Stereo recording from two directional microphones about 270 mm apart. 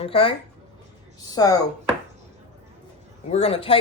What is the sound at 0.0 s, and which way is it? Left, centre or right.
Speech, centre.